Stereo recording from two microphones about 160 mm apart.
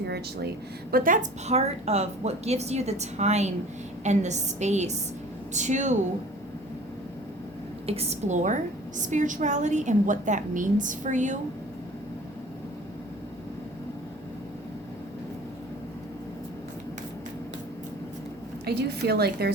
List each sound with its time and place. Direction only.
0.0 s speech: 90° right; by 1.2 s 60° right (ahead or behind)
1.5 s a woman's voice: 40° right (ahead or behind)
7.9 s a woman's voice: 40° right (ahead or behind)
18.6 s a woman's voice: 90° right